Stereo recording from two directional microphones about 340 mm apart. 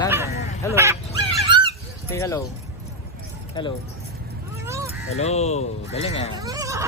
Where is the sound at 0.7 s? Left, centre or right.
Centre.